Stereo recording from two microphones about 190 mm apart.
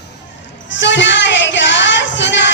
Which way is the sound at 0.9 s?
70° left (ahead or behind).